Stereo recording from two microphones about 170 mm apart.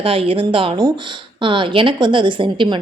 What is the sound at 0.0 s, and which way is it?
A woman's voice, 35° right (ahead or behind).